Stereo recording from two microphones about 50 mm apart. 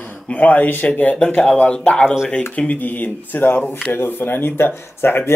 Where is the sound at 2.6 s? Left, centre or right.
Left.